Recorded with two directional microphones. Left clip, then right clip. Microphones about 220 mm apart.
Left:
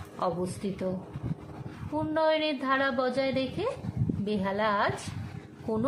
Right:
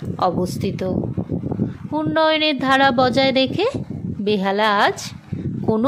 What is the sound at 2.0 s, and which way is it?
A woman's voice, 35° right (ahead or behind).